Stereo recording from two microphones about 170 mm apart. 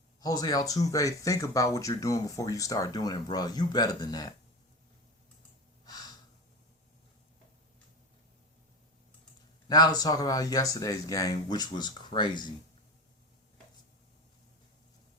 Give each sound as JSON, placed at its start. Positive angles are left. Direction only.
{"t": 0.2, "sound": "speech", "side_deg": 20}
{"t": 5.8, "sound": "gasp", "side_deg": 20}
{"t": 9.6, "sound": "speech", "side_deg": 25}